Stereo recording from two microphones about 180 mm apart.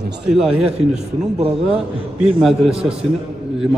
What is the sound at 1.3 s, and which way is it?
Speech, 30° right (ahead or behind).